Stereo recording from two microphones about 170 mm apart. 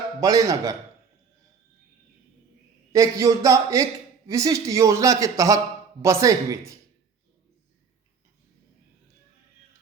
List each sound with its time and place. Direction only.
0.2 s speech: 20° right (ahead or behind)
2.9 s speech: 20° right (ahead or behind)